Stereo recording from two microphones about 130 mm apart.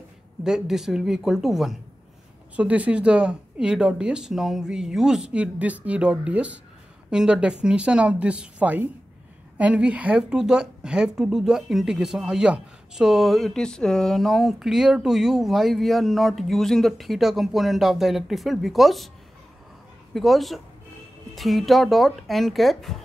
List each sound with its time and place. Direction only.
0.4 s a woman's voice: 5° right (ahead or behind)
20.2 s a woman's voice: centre (ahead or behind)